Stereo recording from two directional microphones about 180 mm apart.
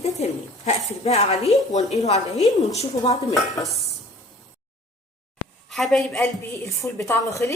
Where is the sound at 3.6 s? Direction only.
Centre (ahead or behind).